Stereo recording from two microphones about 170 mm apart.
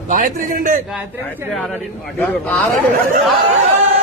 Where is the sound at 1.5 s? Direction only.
5° left (ahead or behind).